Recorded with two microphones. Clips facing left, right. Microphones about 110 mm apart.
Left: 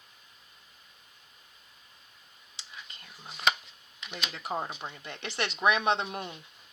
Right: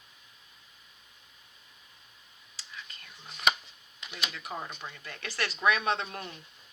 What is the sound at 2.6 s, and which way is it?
Whispering, 25° left (ahead or behind).